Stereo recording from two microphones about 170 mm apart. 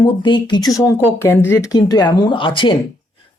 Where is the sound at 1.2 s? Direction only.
15° left (ahead or behind).